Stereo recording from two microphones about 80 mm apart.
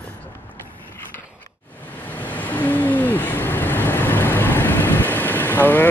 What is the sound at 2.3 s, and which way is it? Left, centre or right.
Vehicle, centre.